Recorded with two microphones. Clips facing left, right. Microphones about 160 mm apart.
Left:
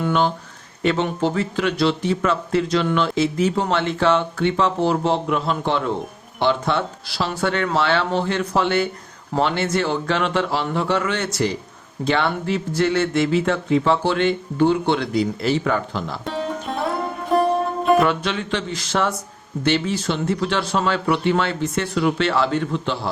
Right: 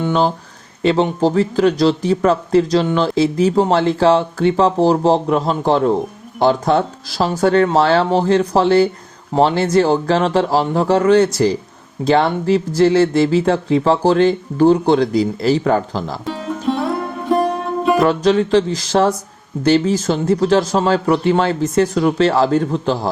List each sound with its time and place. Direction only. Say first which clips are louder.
0.0 s speech: right 3 dB; 35° right (ahead or behind)
16.2 s music: right 6 dB; centre (ahead or behind)
18.0 s speech: right 7 dB; 35° right (ahead or behind)